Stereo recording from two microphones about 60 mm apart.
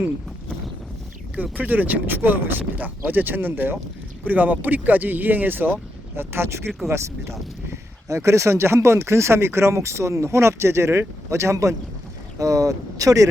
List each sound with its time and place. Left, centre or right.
1.4 s speech: right
12.4 s speech: right